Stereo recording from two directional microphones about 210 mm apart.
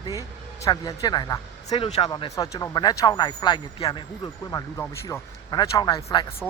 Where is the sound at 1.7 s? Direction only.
30° left (ahead or behind).